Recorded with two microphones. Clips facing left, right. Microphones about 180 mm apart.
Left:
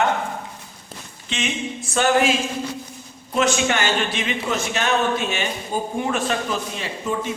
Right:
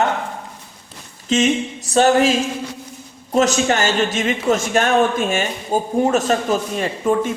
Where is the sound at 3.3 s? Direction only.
40° right (ahead or behind).